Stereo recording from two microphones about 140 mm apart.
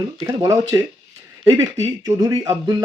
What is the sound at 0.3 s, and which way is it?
Speech, 20° right (ahead or behind).